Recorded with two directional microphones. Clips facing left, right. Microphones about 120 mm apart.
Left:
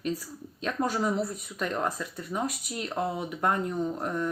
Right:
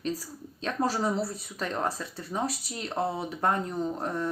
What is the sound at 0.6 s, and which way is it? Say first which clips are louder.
Speech: even; 35° right (ahead or behind).